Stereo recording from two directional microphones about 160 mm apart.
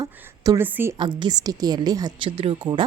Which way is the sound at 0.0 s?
20° right (ahead or behind).